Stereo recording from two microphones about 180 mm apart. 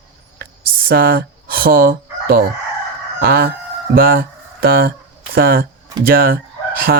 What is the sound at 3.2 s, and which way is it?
Speech, 60° right (ahead or behind).